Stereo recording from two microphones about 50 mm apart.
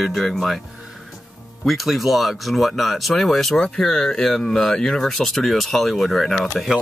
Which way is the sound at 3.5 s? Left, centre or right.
Centre.